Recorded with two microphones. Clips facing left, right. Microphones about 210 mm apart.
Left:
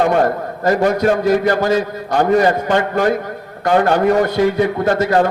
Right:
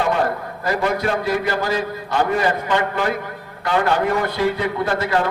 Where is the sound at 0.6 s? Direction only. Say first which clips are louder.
Left 7 dB; 45° left (ahead or behind).